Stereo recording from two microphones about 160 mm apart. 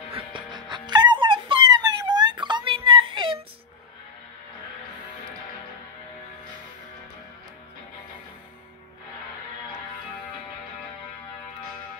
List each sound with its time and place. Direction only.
0.1 s music: 30° right (ahead or behind)